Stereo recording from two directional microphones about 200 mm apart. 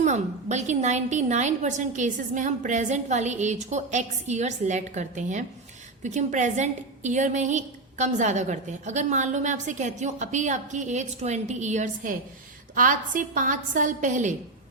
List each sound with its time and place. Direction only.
0.0 s a woman's voice: 35° right (ahead or behind)